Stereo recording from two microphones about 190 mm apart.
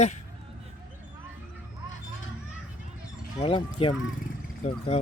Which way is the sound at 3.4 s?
25° left (ahead or behind).